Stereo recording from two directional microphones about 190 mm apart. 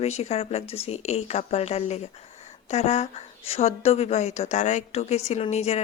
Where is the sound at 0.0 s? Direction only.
35° left (ahead or behind).